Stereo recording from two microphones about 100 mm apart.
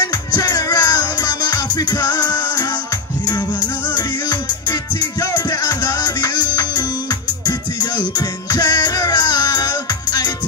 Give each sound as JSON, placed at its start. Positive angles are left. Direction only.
{"t": 0.0, "sound": "music", "side_deg": 40}
{"t": 3.9, "sound": "music", "side_deg": 45}